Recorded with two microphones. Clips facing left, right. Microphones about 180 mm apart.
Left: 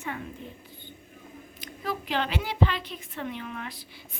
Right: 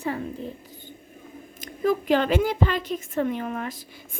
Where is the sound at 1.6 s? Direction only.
45° right (ahead or behind).